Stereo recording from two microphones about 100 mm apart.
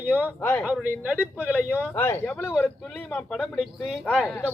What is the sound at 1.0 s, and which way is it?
Speech, 15° right (ahead or behind).